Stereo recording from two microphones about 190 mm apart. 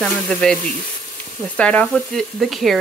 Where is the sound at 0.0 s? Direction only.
5° left (ahead or behind).